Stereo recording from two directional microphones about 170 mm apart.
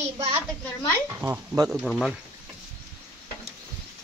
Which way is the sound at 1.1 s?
10° right (ahead or behind).